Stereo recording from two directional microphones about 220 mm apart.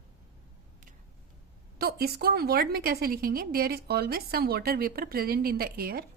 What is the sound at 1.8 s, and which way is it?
A woman's voice, 45° right (ahead or behind).